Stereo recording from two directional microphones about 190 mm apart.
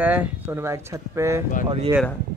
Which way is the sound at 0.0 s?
10° right (ahead or behind).